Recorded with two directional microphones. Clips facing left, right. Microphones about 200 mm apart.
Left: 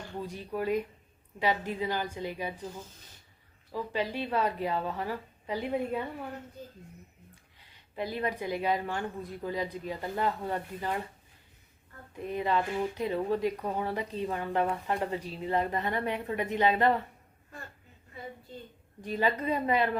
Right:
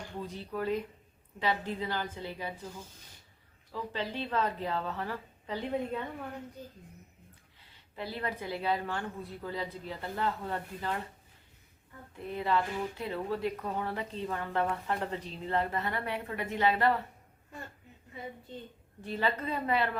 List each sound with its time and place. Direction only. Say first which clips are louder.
0.2 s speech: left 2 dB; 15° left (ahead or behind)
3.7 s speech: left 4 dB; 10° left (ahead or behind)
7.6 s speech: left 5 dB; 15° left (ahead or behind)
12.1 s speech: left 2 dB; 15° left (ahead or behind)
19.0 s speech: left 3 dB; 15° left (ahead or behind)